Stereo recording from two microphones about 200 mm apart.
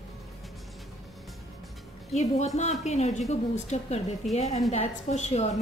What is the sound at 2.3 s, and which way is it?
A woman's voice, 35° left (ahead or behind).